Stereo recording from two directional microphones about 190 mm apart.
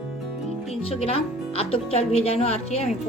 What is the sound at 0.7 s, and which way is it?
A woman's voice, 30° left (ahead or behind).